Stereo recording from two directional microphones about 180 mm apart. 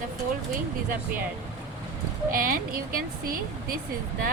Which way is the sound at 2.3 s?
50° right (ahead or behind).